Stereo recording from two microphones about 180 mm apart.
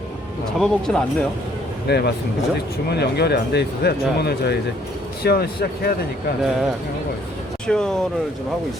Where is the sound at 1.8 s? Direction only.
65° left (ahead or behind).